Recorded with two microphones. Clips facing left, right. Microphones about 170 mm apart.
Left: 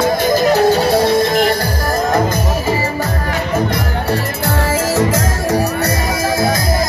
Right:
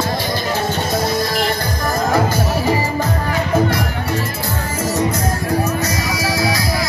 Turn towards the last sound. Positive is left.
turn(degrees=90)